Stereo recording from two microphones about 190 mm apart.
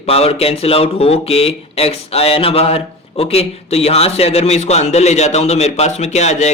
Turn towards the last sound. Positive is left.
turn(degrees=35)  # may be behind; listen again after turning